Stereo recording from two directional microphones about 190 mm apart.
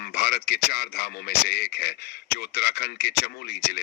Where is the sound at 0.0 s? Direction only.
55° left (ahead or behind).